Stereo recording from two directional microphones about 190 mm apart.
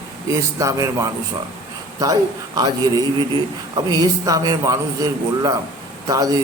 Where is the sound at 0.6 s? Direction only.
15° right (ahead or behind).